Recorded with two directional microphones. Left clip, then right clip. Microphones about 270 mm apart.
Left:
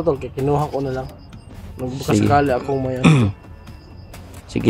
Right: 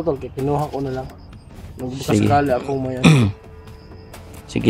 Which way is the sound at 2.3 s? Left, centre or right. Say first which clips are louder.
Left 1 dB; centre.